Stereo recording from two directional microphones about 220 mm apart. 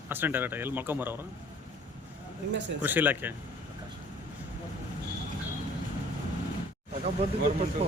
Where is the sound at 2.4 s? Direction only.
55° right (ahead or behind).